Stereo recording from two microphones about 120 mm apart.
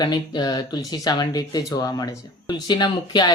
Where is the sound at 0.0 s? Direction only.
35° left (ahead or behind).